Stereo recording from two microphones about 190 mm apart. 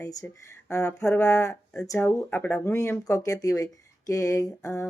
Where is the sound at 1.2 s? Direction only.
15° left (ahead or behind).